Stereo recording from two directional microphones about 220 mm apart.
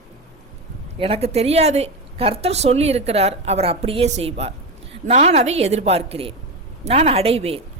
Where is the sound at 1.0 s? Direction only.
25° right (ahead or behind).